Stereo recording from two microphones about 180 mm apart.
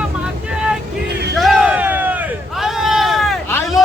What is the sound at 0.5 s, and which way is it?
Vehicle, 5° right (ahead or behind).